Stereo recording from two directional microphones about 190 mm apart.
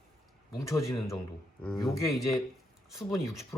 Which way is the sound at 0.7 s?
15° left (ahead or behind).